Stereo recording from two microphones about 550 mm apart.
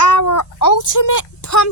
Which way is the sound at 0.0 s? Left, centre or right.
Left.